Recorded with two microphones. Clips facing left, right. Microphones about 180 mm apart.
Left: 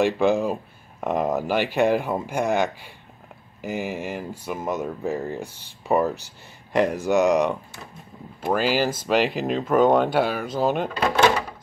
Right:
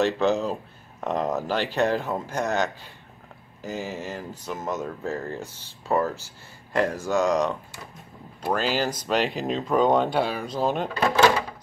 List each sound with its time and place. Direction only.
0.0 s speech: 10° left (ahead or behind)
11.1 s speech: 20° left (ahead or behind)